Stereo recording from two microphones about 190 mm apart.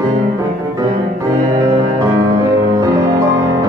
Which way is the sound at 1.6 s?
20° right (ahead or behind).